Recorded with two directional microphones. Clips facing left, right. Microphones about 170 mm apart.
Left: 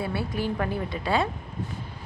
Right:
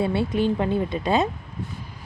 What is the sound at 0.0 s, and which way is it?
A woman's voice, 25° right (ahead or behind).